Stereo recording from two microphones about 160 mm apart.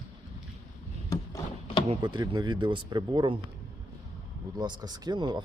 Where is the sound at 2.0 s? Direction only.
30° right (ahead or behind).